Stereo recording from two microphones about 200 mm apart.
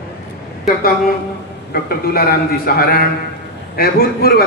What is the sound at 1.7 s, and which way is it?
A man's voice, 50° left (ahead or behind).